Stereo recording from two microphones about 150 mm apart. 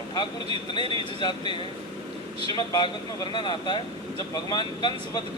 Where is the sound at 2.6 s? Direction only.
30° left (ahead or behind).